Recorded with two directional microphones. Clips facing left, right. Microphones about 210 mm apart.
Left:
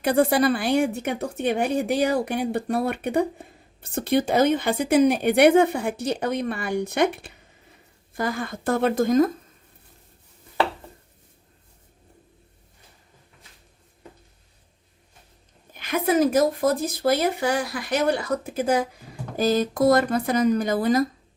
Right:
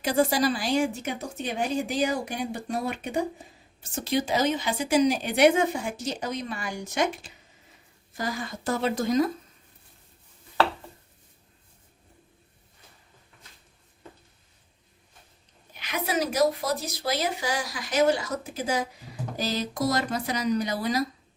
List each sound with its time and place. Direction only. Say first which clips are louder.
0.0 s speech: left 4 dB; 60° left (ahead or behind)
15.7 s speech: left 7 dB; 50° left (ahead or behind)